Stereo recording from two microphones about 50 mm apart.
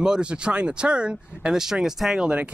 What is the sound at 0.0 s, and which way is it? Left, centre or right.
Speech, centre.